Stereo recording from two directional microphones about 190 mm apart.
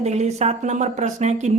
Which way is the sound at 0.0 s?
35° right (ahead or behind).